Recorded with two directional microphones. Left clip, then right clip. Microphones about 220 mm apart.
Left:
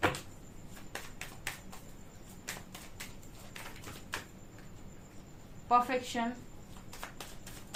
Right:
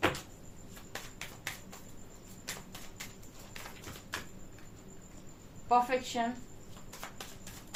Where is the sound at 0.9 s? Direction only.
20° left (ahead or behind).